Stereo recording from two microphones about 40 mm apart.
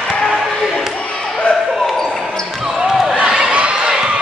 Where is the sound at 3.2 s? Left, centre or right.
Right.